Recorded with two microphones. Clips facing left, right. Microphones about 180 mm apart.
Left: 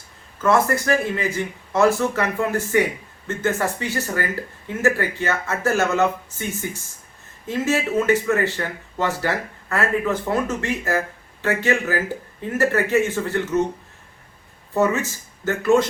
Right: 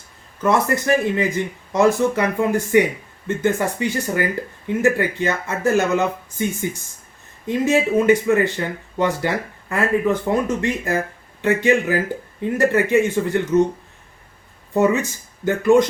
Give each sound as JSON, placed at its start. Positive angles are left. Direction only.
{"t": 0.4, "sound": "speech", "side_deg": -20}
{"t": 14.8, "sound": "speech", "side_deg": -15}